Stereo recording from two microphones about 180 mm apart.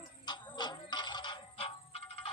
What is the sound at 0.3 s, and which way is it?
Music, 25° left (ahead or behind).